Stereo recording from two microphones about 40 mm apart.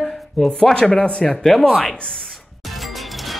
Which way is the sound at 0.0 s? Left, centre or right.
Centre.